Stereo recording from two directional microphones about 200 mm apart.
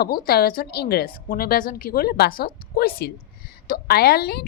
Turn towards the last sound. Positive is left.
turn(degrees=50)  # may be behind; listen again after turning